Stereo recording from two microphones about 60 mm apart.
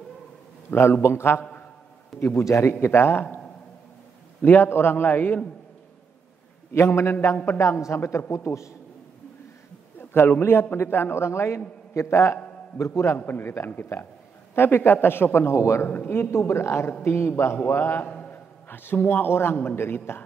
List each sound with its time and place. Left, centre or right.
0.7 s a man's voice: left
2.8 s a man's voice: left
4.4 s a man's voice: left
6.7 s a man's voice: left
9.9 s a sound: left
10.4 s a man's voice: left
12.7 s a man's voice: left
13.2 s a man's voice: left
15.5 s a man's voice: left
16.1 s a man's voice: left
16.3 s a man's voice: left
18.0 s a sound: centre
18.3 s a sound: left
19.2 s a man's voice: left